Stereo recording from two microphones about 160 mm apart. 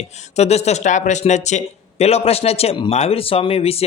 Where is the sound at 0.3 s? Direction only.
40° left (ahead or behind).